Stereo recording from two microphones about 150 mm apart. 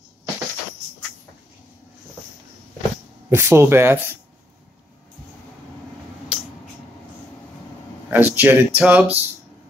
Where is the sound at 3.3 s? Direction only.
15° right (ahead or behind).